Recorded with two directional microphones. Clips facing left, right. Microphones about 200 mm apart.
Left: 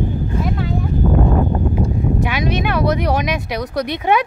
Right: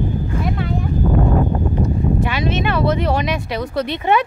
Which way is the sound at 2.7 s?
15° left (ahead or behind).